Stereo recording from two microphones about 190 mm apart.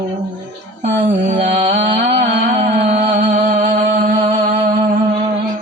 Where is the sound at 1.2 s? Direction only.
40° right (ahead or behind).